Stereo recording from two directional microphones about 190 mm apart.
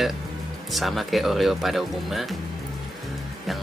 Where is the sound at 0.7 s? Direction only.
Centre (ahead or behind).